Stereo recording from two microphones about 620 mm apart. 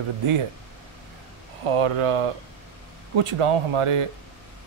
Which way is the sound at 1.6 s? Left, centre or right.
Right.